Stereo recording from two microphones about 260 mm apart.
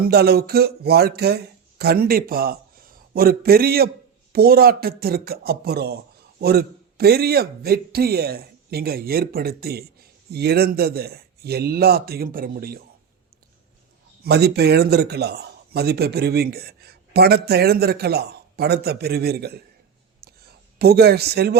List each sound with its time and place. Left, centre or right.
0.0 s a man's voice: right
14.3 s a man's voice: right
20.2 s a sound: right
20.7 s a man's voice: right